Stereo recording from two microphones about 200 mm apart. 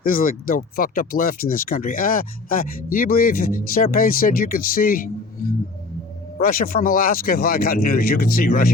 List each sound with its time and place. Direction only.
0.0 s speech: 45° left (ahead or behind)